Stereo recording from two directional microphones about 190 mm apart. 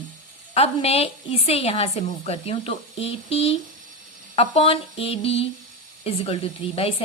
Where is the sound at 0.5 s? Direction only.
30° left (ahead or behind).